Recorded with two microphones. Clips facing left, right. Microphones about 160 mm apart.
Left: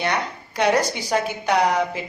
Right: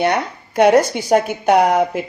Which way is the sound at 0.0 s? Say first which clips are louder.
Right 6 dB; 50° right (ahead or behind).